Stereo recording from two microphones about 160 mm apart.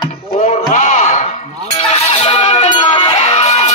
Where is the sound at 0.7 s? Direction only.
55° left (ahead or behind).